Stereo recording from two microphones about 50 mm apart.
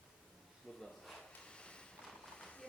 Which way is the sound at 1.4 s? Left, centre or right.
Left.